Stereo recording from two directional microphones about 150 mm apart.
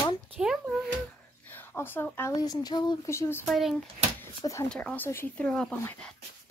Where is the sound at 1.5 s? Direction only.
15° left (ahead or behind).